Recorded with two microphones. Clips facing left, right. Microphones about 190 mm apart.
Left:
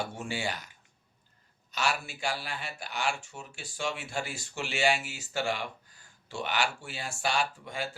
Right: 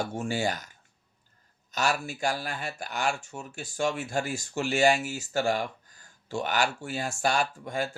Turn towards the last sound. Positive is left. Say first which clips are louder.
# right 3 dB
turn(degrees=-45)  # may be behind; listen again after turning